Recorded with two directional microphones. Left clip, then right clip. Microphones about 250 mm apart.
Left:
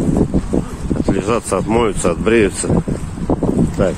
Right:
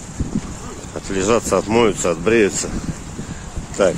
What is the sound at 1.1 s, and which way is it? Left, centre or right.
Speech, centre.